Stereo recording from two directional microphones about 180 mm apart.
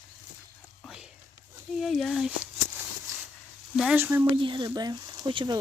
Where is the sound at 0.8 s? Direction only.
5° right (ahead or behind).